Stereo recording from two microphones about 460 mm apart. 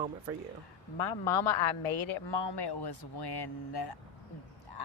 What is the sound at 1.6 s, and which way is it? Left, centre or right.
A woman's voice, left.